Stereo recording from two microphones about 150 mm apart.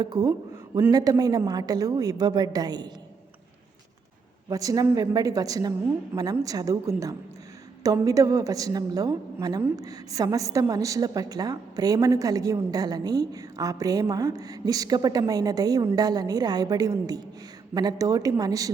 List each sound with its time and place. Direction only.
0.0 s a woman's voice: 25° right (ahead or behind)
4.4 s a woman's voice: 25° right (ahead or behind)